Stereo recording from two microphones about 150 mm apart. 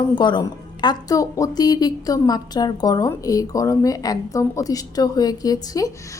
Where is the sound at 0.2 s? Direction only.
30° left (ahead or behind).